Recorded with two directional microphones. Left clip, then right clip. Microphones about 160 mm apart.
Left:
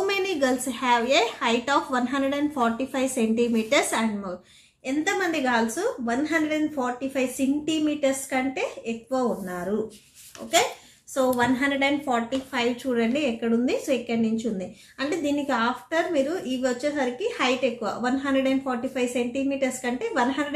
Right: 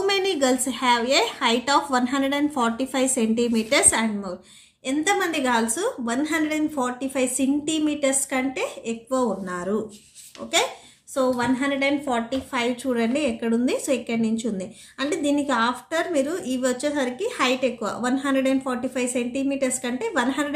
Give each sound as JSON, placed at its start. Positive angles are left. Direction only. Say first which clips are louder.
{"t": 0.0, "sound": "a woman's voice", "louder": "right 2 dB", "side_deg": -20}